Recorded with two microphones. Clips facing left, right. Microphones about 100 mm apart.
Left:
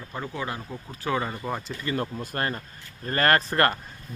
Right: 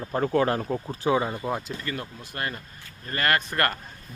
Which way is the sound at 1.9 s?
40° left (ahead or behind).